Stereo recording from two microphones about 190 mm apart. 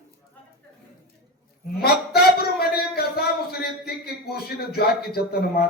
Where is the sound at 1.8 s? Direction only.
55° left (ahead or behind).